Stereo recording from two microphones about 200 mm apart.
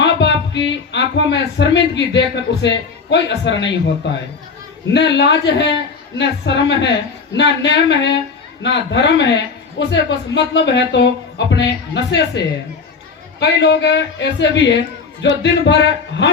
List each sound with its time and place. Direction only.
0.0 s speech: 60° left (ahead or behind)
13.4 s speech: 60° left (ahead or behind)